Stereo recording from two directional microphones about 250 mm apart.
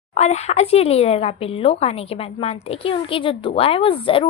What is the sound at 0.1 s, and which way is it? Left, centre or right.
Speech, left.